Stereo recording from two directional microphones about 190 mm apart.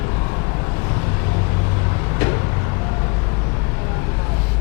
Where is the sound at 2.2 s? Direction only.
20° left (ahead or behind).